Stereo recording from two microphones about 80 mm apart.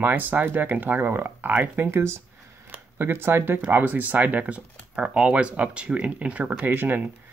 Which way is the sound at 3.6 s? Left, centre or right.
Right.